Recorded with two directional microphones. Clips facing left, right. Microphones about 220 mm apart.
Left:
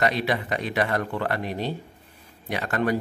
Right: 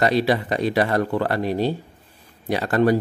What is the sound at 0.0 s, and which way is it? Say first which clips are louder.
Speech: right 5 dB; 35° right (ahead or behind).